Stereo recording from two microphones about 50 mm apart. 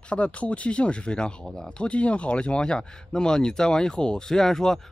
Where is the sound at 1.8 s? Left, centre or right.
Left.